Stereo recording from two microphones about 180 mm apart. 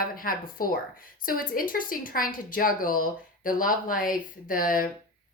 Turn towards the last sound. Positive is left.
turn(degrees=50)  # may be behind; listen again after turning